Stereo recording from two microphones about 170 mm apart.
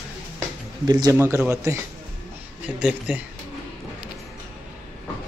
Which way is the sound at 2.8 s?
5° right (ahead or behind).